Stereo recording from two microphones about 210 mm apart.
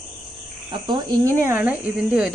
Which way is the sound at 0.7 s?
20° right (ahead or behind).